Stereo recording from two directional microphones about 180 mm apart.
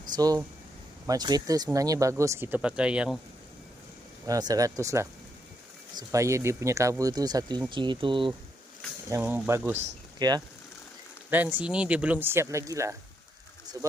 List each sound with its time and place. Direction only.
0.2 s speech: 20° right (ahead or behind); by 3.2 s 5° right (ahead or behind)
4.3 s speech: 20° right (ahead or behind)
9.0 s speech: 15° right (ahead or behind)
10.2 s speech: 20° right (ahead or behind)
11.5 s speech: 5° right (ahead or behind)